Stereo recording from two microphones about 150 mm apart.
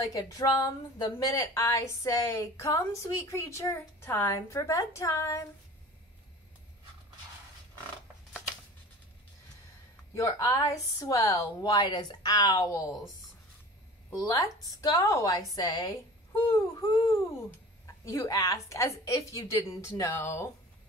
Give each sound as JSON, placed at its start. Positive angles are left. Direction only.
{"t": 0.0, "sound": "a woman's voice", "side_deg": 25}
{"t": 10.1, "sound": "a woman's voice", "side_deg": 20}
{"t": 14.1, "sound": "a woman's voice", "side_deg": 25}